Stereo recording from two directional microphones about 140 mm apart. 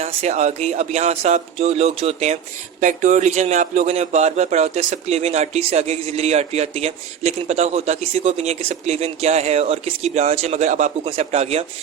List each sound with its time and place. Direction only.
0.0 s a man's voice: 50° right (ahead or behind)
2.8 s a man's voice: 60° right (ahead or behind)